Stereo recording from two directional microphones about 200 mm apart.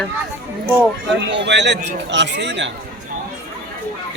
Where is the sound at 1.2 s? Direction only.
60° right (ahead or behind).